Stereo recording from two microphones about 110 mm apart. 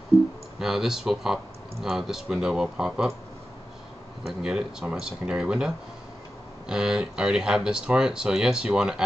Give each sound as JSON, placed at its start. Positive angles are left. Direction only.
{"t": 0.1, "sound": "clicking", "side_deg": -5}
{"t": 0.6, "sound": "speech", "side_deg": -5}
{"t": 4.2, "sound": "speech", "side_deg": -5}
{"t": 6.7, "sound": "speech", "side_deg": -5}